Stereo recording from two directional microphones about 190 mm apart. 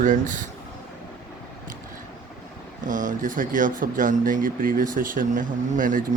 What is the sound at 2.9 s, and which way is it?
Speech, 40° right (ahead or behind).